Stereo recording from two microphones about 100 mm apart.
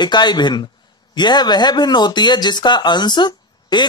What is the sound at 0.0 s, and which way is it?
Speech, 45° left (ahead or behind).